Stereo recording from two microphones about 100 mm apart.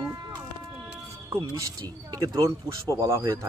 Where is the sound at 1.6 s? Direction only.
30° right (ahead or behind).